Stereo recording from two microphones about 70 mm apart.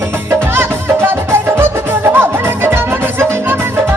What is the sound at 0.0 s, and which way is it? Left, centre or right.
Music, right.